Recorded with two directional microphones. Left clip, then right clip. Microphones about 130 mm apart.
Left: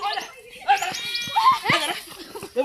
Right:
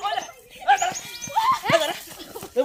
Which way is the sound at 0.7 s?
20° right (ahead or behind).